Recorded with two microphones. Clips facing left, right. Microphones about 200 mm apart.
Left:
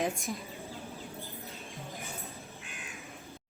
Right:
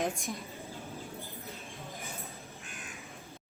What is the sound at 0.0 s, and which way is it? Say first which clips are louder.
Speech: left 1 dB; centre (ahead or behind).